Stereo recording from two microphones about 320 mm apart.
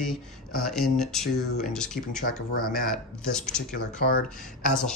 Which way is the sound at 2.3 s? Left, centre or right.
Left.